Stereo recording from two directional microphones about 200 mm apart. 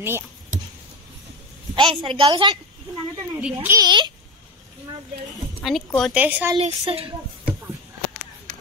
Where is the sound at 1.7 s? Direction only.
25° right (ahead or behind).